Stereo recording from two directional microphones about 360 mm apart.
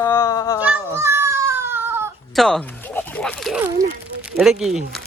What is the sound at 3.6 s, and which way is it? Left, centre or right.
Speech, centre.